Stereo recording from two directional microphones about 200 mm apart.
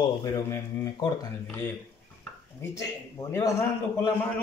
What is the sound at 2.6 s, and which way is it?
A man's voice, 15° left (ahead or behind).